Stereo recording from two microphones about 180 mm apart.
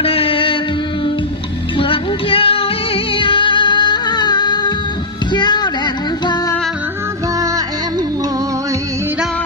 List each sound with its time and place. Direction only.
0.0 s music: 30° left (ahead or behind)
1.8 s music: 30° left (ahead or behind)